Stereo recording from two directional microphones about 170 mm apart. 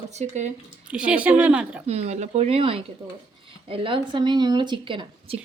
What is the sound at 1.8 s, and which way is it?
Speech, 40° right (ahead or behind).